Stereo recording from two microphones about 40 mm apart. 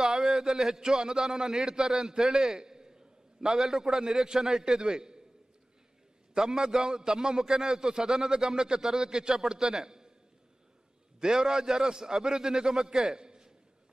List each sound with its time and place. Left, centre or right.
0.0 s a man's voice: centre
6.3 s a man's voice: centre
11.1 s a man's voice: centre